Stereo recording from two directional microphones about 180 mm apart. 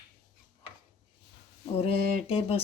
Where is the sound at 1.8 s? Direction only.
35° left (ahead or behind).